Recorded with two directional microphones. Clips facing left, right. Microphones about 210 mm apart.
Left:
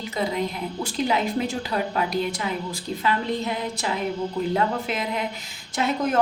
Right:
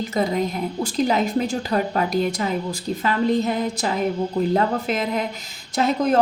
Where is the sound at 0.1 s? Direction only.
45° right (ahead or behind).